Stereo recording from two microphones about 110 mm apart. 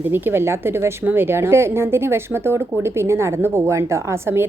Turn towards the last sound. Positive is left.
turn(degrees=-20)  # may be behind; listen again after turning